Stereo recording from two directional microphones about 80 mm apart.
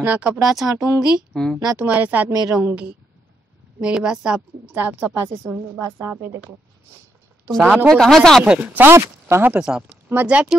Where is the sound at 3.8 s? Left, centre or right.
Centre.